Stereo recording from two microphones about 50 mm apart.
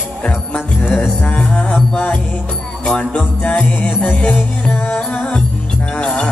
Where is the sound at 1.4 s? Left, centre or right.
Centre.